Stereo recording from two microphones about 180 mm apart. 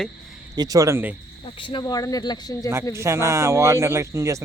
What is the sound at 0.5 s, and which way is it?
Speech, 20° right (ahead or behind).